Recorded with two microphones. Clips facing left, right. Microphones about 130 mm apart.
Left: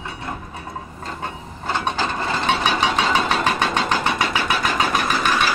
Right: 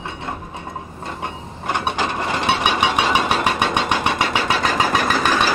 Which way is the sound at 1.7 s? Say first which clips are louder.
Right 1 dB; 15° right (ahead or behind).